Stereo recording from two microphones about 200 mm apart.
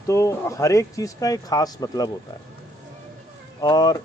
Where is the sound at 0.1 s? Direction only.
15° left (ahead or behind).